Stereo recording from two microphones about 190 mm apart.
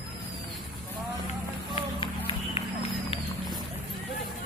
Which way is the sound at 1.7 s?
25° left (ahead or behind).